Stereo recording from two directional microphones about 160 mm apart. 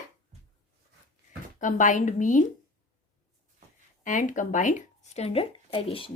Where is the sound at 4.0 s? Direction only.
55° left (ahead or behind); by 6.1 s 35° left (ahead or behind).